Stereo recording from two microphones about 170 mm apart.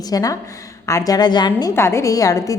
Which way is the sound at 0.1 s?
20° left (ahead or behind).